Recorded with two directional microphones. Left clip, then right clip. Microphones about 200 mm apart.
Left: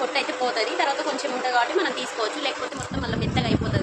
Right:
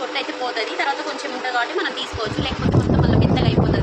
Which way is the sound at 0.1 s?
15° left (ahead or behind).